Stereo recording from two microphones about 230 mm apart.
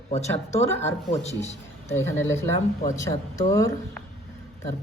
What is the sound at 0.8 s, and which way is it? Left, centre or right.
Speech, left.